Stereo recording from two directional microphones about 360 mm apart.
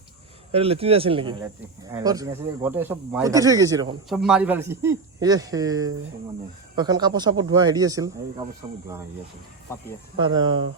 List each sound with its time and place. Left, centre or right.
0.5 s speech: centre
10.2 s speech: centre